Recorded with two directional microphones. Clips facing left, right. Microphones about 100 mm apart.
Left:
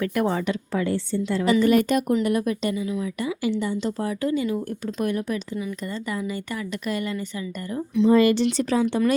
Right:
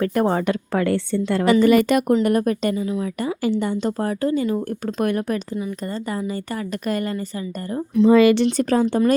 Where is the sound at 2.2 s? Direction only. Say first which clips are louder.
Right 4 dB; 50° right (ahead or behind).